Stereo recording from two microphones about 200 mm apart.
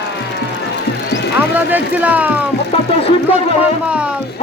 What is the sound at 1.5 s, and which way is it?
Speech, 10° right (ahead or behind).